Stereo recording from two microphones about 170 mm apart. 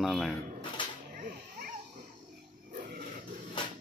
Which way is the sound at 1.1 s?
55° right (ahead or behind).